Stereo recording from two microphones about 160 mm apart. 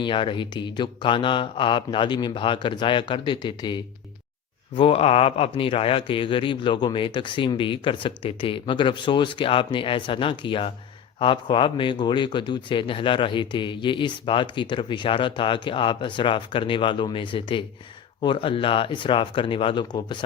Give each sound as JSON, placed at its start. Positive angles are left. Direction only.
{"t": 0.0, "sound": "speech", "side_deg": 30}